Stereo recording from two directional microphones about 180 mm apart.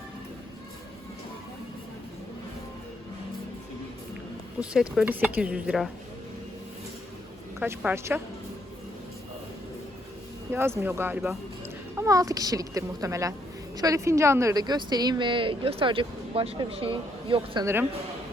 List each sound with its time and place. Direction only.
4.6 s speech: 5° right (ahead or behind)
7.6 s speech: 10° right (ahead or behind)
10.5 s a woman's voice: 15° right (ahead or behind)